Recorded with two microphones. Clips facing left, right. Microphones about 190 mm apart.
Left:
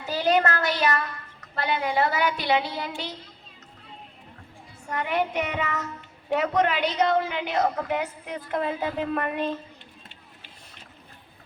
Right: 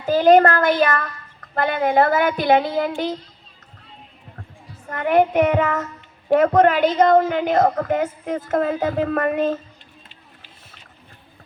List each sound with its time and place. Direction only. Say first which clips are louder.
0.0 s child singing: right 10 dB; 50° right (ahead or behind)
4.9 s child singing: right 9 dB; 50° right (ahead or behind)